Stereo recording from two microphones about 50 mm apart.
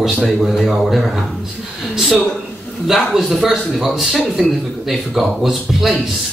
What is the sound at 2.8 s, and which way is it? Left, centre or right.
A man's voice, centre.